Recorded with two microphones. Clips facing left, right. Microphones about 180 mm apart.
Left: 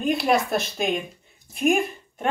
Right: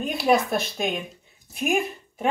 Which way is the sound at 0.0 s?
Centre (ahead or behind).